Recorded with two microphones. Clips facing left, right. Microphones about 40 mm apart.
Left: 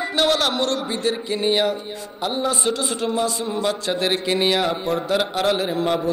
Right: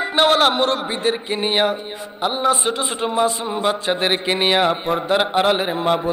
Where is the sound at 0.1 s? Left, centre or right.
Right.